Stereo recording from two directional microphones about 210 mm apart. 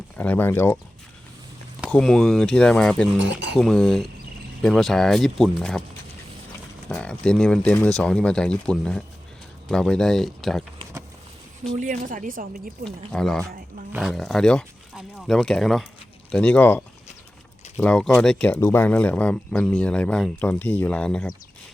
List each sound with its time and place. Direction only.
0.2 s speech: 10° left (ahead or behind)
1.9 s speech: 5° left (ahead or behind)
6.8 s speech: 5° left (ahead or behind)
11.7 s speech: 35° right (ahead or behind)
13.1 s speech: 5° left (ahead or behind)